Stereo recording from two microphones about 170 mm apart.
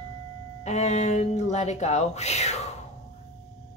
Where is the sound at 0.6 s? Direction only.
40° left (ahead or behind).